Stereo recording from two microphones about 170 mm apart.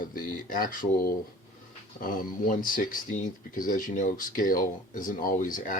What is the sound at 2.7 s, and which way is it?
Speech, 55° left (ahead or behind).